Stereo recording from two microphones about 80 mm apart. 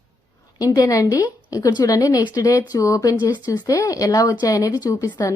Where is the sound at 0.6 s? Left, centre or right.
Left.